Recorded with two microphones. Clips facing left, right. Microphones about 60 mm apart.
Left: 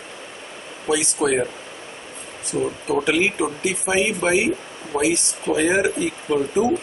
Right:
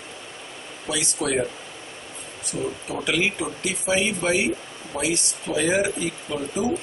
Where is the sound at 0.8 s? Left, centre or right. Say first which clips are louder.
Left 6 dB; left.